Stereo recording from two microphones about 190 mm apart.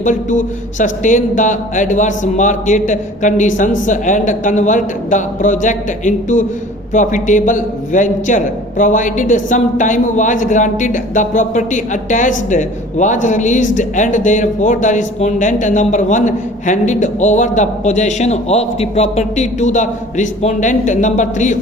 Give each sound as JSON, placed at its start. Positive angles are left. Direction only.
{"t": 0.0, "sound": "speech", "side_deg": 40}